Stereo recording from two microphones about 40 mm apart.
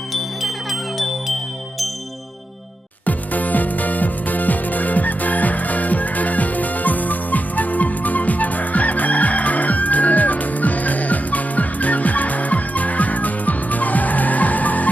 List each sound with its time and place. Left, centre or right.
0.1 s music: centre
3.1 s music: left